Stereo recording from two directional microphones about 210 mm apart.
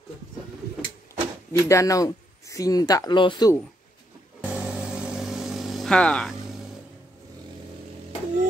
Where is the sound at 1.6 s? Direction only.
15° left (ahead or behind).